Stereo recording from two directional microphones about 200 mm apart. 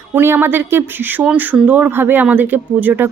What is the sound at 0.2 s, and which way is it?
Speech, 10° right (ahead or behind).